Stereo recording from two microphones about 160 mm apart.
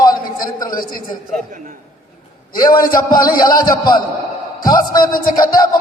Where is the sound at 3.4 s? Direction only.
25° left (ahead or behind).